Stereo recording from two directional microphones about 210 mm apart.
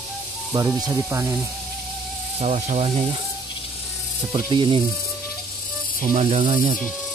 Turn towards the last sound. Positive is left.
turn(degrees=-35)  # may be behind; listen again after turning